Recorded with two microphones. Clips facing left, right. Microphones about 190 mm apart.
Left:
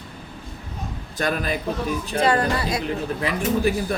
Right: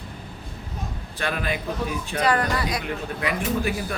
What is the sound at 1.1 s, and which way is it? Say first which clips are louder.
Speech: left 3 dB; 40° left (ahead or behind).